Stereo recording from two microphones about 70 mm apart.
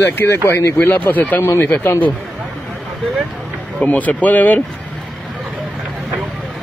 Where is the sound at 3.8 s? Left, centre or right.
Left.